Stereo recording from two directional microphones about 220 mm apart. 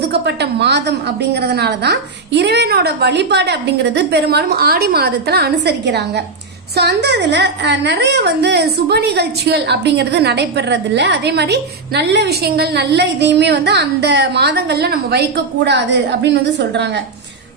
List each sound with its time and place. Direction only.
0.0 s a woman's voice: 50° right (ahead or behind)